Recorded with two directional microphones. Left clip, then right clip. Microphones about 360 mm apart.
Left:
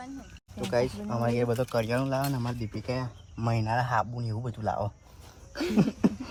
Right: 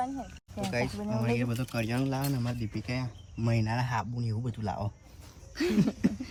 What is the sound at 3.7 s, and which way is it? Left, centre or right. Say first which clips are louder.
Speech: left 6 dB; left.